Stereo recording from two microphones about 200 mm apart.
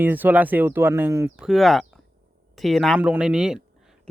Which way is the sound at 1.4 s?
Centre (ahead or behind).